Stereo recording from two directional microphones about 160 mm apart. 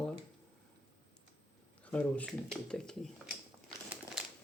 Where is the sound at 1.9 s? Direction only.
10° left (ahead or behind).